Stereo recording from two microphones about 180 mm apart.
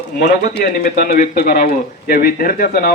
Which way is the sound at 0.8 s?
55° left (ahead or behind).